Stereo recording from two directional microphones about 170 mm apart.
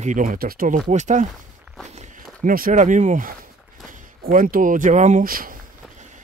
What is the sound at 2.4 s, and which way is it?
Speech, 55° right (ahead or behind).